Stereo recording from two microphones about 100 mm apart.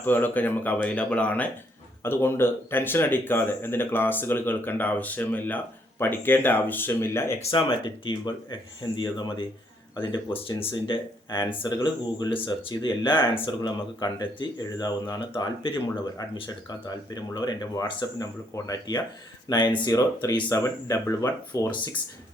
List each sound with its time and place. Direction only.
0.0 s speech: 20° left (ahead or behind)
2.0 s speech: 25° left (ahead or behind)
7.3 s speech: 60° left (ahead or behind)
16.1 s speech: 40° left (ahead or behind)